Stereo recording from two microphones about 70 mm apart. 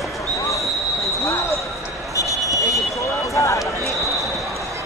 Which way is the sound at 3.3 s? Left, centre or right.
Left.